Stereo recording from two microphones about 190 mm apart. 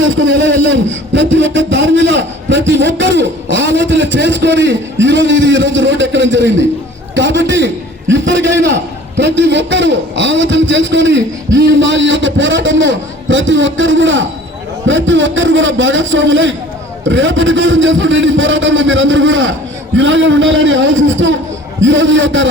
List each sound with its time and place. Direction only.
0.0 s a man's voice: 75° right (ahead or behind)